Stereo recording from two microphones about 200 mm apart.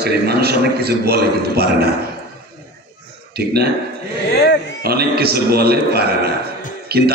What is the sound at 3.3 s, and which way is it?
Speech, 50° right (ahead or behind).